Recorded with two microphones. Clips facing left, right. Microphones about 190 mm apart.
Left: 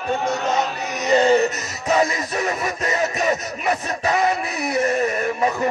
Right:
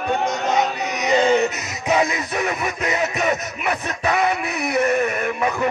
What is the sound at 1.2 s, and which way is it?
Music, 35° left (ahead or behind).